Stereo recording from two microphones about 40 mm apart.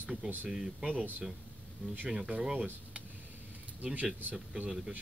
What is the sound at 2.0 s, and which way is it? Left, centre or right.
Speech, right.